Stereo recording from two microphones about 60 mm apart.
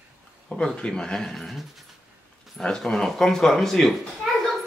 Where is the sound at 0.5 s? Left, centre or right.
Centre.